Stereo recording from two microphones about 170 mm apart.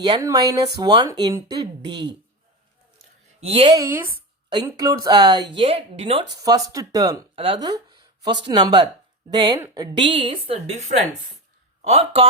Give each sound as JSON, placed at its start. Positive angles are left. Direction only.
{"t": 0.0, "sound": "speech", "side_deg": -25}
{"t": 3.4, "sound": "a woman's voice", "side_deg": -35}
{"t": 3.8, "sound": "speech", "side_deg": -10}
{"t": 4.4, "sound": "a woman's voice", "side_deg": -25}
{"t": 6.3, "sound": "speech", "side_deg": -20}
{"t": 7.3, "sound": "a woman's voice", "side_deg": -30}